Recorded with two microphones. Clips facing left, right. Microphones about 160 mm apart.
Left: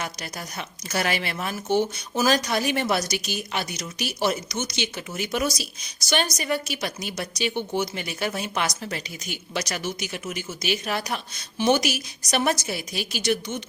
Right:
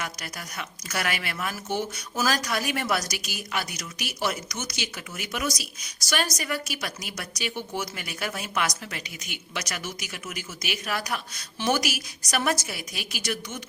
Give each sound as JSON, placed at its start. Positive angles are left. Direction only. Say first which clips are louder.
{"t": 0.0, "sound": "speech", "louder": "left 3 dB", "side_deg": 30}